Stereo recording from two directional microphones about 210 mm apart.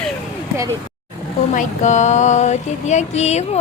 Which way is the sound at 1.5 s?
35° left (ahead or behind).